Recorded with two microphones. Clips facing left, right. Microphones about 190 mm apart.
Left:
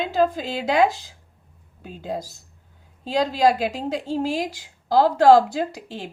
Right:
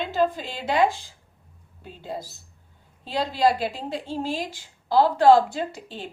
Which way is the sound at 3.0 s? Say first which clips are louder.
Left 3 dB; 45° left (ahead or behind).